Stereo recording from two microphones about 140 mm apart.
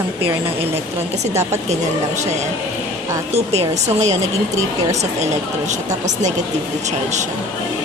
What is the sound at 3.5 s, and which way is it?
Speech, 55° right (ahead or behind).